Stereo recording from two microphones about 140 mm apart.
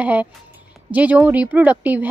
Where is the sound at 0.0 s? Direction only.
10° right (ahead or behind).